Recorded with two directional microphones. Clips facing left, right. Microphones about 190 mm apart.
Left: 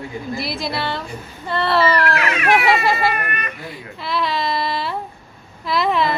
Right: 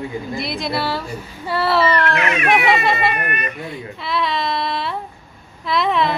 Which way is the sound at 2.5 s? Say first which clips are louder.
Left 1 dB; centre (ahead or behind).